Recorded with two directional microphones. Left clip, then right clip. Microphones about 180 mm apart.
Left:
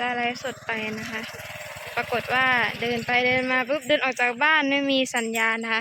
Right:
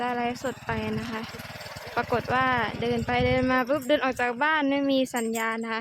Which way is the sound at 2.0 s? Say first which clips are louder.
Left 2 dB; 25° right (ahead or behind).